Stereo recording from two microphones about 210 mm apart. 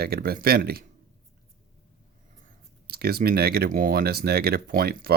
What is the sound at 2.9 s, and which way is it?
Speech, 45° right (ahead or behind).